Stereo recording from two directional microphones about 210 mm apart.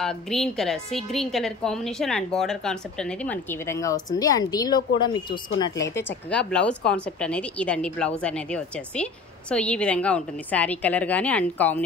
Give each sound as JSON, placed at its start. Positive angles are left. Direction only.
{"t": 0.0, "sound": "a woman's voice", "side_deg": 0}